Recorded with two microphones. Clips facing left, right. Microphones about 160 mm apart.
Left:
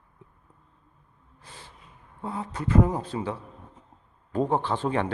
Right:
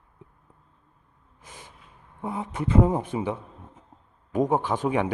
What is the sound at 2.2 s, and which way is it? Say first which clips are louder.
A man's voice: right 2 dB; 15° right (ahead or behind).